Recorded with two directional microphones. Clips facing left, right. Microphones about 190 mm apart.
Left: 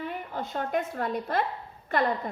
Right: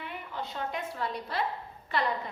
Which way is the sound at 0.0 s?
45° left (ahead or behind).